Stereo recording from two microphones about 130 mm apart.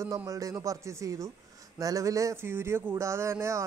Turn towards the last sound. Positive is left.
turn(degrees=-20)  # may be behind; listen again after turning